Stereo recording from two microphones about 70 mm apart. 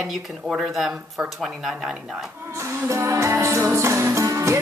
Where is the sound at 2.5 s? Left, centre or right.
Right.